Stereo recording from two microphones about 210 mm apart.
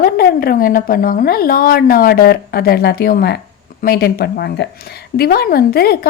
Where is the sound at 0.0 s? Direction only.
45° left (ahead or behind).